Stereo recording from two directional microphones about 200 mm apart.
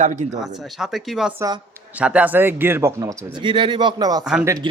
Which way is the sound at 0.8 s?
Centre (ahead or behind).